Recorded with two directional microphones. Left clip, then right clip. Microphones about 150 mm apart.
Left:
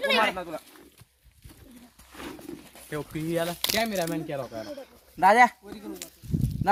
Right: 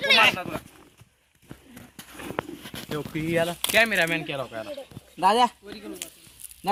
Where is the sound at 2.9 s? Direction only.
50° right (ahead or behind).